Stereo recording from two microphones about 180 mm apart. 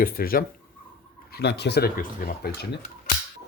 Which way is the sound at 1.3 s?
70° left (ahead or behind).